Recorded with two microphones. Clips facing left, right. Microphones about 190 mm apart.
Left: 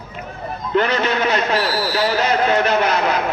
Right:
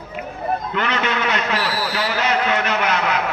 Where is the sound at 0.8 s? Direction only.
35° left (ahead or behind).